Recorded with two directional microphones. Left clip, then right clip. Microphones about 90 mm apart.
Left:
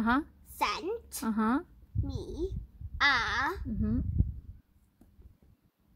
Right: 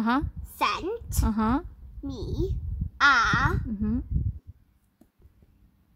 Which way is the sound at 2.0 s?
15° right (ahead or behind).